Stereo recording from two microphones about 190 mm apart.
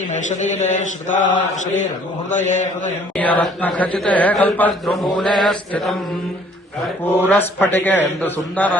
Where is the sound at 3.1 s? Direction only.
5° left (ahead or behind).